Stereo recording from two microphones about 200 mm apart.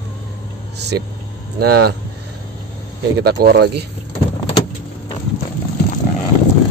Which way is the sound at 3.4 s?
55° right (ahead or behind).